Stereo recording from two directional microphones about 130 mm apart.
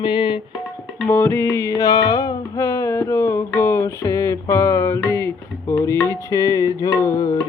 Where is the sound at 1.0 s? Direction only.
15° left (ahead or behind).